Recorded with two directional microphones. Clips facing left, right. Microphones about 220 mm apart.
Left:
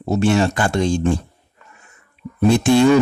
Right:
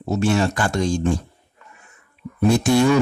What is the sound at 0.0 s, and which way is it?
Speech, 30° left (ahead or behind).